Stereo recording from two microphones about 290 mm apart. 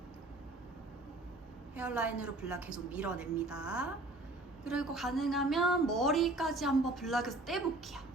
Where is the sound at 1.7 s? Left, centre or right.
Centre.